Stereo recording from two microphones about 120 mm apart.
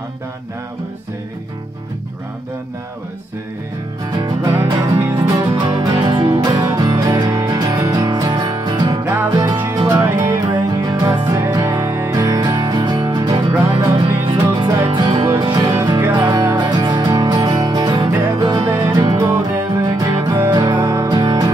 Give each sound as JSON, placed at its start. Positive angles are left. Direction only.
{"t": 4.2, "sound": "music", "side_deg": -30}
{"t": 10.8, "sound": "music", "side_deg": -35}
{"t": 11.4, "sound": "music", "side_deg": -25}
{"t": 16.0, "sound": "music", "side_deg": -15}
{"t": 16.3, "sound": "music", "side_deg": -35}